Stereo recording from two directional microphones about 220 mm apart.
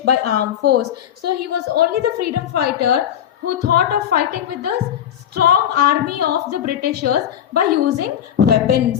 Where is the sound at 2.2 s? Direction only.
45° right (ahead or behind).